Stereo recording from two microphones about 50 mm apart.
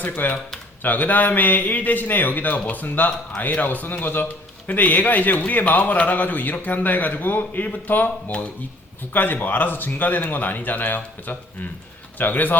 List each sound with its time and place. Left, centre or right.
0.0 s a man's voice: left
9.1 s a man's voice: left